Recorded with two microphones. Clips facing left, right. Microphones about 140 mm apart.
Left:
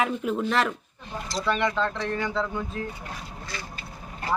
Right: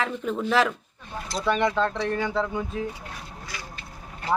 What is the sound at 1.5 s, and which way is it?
Speech, 10° right (ahead or behind).